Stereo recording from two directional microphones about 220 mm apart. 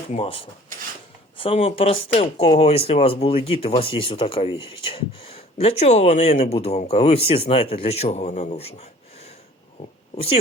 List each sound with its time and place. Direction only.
0.1 s speech: 25° left (ahead or behind)